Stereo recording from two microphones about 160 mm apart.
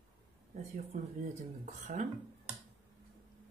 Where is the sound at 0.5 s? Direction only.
50° right (ahead or behind).